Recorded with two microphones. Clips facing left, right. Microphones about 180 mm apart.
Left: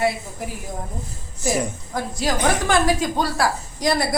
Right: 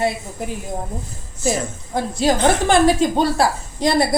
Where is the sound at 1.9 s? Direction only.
25° right (ahead or behind).